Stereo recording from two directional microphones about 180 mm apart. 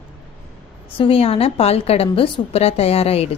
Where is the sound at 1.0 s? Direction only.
30° left (ahead or behind).